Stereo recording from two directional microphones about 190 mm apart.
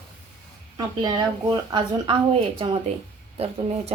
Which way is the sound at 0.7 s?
20° right (ahead or behind).